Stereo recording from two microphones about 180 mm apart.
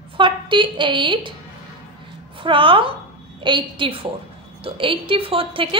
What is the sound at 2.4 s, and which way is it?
A woman's voice, 30° right (ahead or behind).